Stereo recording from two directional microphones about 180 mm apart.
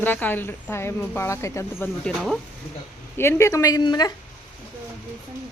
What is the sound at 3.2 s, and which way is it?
Speech, 15° left (ahead or behind).